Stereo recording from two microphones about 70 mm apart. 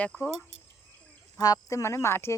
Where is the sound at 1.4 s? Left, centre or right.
Left.